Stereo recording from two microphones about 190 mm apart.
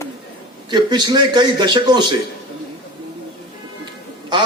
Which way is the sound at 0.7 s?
25° right (ahead or behind).